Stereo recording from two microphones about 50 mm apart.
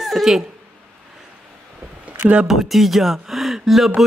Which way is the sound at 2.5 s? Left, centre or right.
Centre.